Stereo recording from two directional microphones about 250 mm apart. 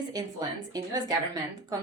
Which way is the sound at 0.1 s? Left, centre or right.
Centre.